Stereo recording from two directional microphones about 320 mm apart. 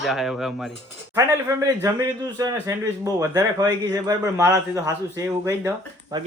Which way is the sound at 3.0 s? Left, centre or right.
Centre.